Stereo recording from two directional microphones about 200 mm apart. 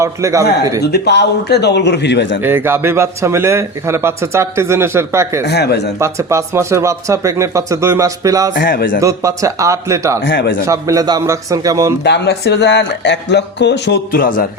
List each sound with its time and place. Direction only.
0.0 s a man's voice: 15° right (ahead or behind)
0.8 s speech: 55° left (ahead or behind)
2.4 s a man's voice: 10° right (ahead or behind)
5.5 s speech: 55° left (ahead or behind)
6.0 s a man's voice: 15° right (ahead or behind)
8.5 s a man's voice: 45° left (ahead or behind)
9.0 s a man's voice: 15° right (ahead or behind)
10.2 s speech: 65° left (ahead or behind)
10.7 s a man's voice: 15° right (ahead or behind)
12.0 s speech: 60° left (ahead or behind)